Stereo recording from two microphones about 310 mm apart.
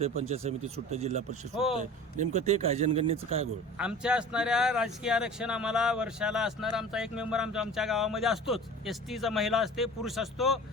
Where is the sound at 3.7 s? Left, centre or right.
Centre.